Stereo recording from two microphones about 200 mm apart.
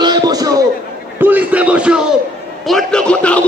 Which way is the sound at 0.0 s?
20° right (ahead or behind).